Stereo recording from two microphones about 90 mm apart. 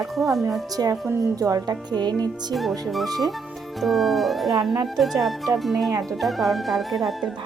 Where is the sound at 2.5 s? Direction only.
Centre (ahead or behind).